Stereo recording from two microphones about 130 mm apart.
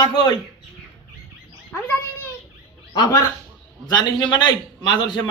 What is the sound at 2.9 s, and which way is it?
A man's voice, 35° left (ahead or behind).